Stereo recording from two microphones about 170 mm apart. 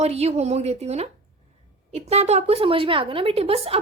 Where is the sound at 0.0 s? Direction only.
40° right (ahead or behind).